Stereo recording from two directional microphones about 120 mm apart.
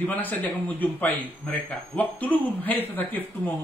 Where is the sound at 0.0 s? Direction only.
15° left (ahead or behind).